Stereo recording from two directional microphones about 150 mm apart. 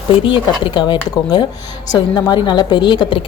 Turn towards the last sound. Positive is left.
turn(degrees=35)  # may be behind; listen again after turning